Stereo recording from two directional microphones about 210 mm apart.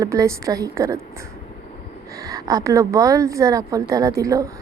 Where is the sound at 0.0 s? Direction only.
15° right (ahead or behind).